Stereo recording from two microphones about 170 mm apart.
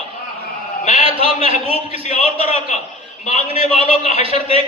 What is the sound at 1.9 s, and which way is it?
Speech, 40° left (ahead or behind).